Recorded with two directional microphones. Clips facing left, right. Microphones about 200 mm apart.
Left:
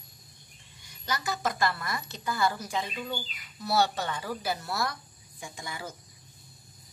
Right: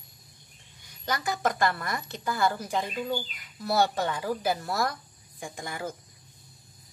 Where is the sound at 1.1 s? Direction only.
55° right (ahead or behind).